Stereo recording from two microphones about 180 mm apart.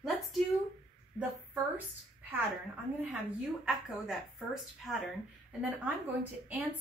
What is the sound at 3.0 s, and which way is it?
A woman's voice, 5° right (ahead or behind).